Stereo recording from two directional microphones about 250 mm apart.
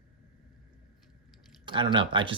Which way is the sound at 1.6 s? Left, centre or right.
Centre.